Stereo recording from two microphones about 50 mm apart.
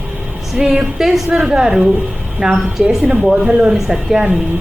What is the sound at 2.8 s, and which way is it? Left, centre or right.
A woman's voice, centre.